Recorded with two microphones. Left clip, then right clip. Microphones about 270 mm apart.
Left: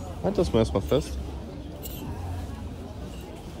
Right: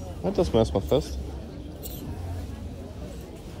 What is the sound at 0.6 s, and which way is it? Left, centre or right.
Speech, left.